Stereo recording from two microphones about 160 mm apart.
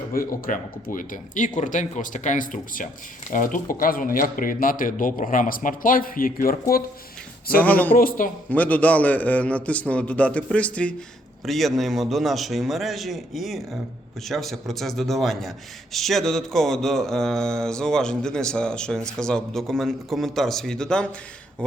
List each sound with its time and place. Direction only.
0.1 s speech: 60° left (ahead or behind)
7.6 s a man's voice: 10° left (ahead or behind)
7.9 s speech: 60° left (ahead or behind)
8.4 s a man's voice: 10° left (ahead or behind)